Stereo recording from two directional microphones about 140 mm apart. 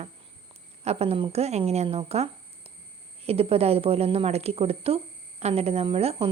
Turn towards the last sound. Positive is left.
turn(degrees=-40)  # may be behind; listen again after turning